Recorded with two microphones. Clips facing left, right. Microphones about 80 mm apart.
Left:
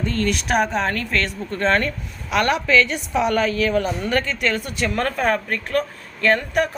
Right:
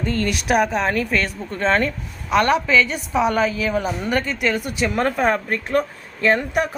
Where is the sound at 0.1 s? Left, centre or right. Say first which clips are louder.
Right 2 dB; centre.